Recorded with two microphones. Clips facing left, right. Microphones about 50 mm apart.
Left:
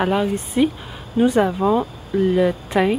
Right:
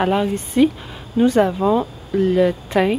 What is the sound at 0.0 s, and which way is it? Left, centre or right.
Speech, centre.